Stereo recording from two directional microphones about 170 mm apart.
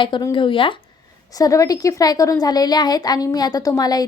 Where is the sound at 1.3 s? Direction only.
20° left (ahead or behind).